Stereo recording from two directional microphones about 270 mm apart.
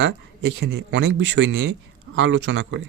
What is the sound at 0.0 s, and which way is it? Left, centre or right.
Speech, right.